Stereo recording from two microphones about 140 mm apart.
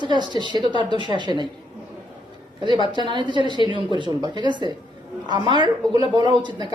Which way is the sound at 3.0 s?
35° right (ahead or behind).